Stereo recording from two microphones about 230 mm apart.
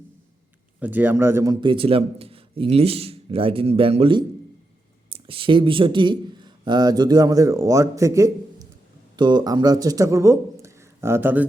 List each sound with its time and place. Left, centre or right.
0.8 s a man's voice: centre